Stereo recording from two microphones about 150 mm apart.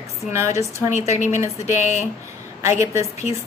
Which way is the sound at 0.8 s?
50° left (ahead or behind).